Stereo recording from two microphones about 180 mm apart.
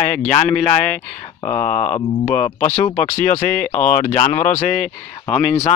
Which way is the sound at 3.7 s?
40° left (ahead or behind).